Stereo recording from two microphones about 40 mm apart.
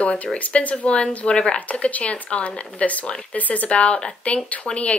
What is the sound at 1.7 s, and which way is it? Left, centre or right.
Speech, left.